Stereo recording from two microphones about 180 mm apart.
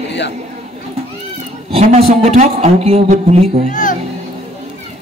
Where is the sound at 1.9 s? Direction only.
35° right (ahead or behind).